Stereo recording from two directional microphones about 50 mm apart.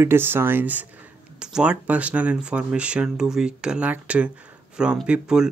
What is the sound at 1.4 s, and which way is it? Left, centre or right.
Speech, right.